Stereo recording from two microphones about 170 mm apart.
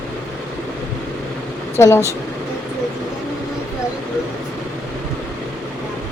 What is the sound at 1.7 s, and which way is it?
Speech, 15° left (ahead or behind).